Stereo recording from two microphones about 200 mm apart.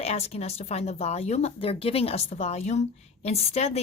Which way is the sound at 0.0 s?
30° left (ahead or behind).